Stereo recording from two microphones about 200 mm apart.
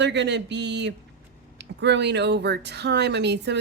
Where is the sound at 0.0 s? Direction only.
60° right (ahead or behind).